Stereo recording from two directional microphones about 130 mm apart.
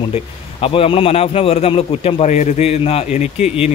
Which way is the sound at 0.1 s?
45° left (ahead or behind).